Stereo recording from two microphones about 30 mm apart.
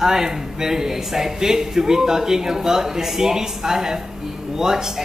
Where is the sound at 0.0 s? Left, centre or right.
Centre.